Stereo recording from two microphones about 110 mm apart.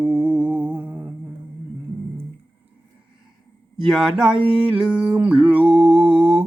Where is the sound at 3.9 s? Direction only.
5° right (ahead or behind).